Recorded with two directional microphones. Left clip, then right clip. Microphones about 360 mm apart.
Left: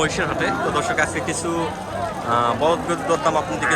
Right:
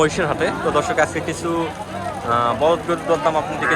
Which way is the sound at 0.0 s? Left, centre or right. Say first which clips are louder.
Right 3 dB; centre.